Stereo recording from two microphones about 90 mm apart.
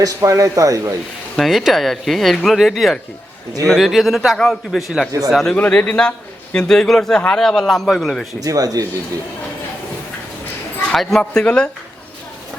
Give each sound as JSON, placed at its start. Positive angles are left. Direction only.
{"t": 0.0, "sound": "a man's voice", "side_deg": -40}
{"t": 1.4, "sound": "speech", "side_deg": 0}
{"t": 5.5, "sound": "a man's voice", "side_deg": 15}
{"t": 8.4, "sound": "speech", "side_deg": -45}
{"t": 10.8, "sound": "a man's voice", "side_deg": 5}